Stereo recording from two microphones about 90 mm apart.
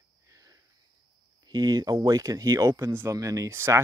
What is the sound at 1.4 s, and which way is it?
Speech, 45° right (ahead or behind).